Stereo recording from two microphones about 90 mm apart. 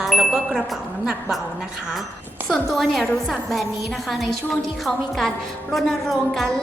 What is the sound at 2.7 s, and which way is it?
Speech, centre (ahead or behind).